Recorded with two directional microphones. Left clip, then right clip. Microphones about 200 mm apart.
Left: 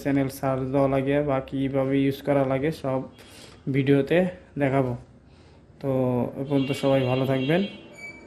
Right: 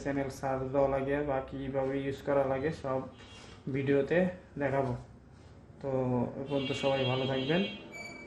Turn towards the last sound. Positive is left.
turn(degrees=45)  # may be behind; listen again after turning